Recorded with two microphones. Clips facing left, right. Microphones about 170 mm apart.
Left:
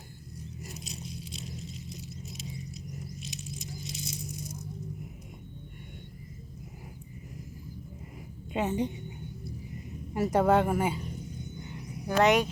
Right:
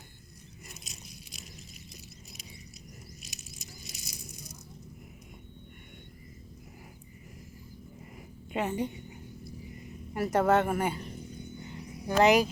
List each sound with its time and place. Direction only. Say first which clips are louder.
0.6 s scrape: left 7 dB; 35° left (ahead or behind)
3.2 s a sound: left 9 dB; 30° left (ahead or behind)
8.5 s a woman's voice: left 2 dB; 20° left (ahead or behind)
10.2 s speech: left 1 dB; 15° left (ahead or behind)
12.0 s speech: right 1 dB; centre (ahead or behind)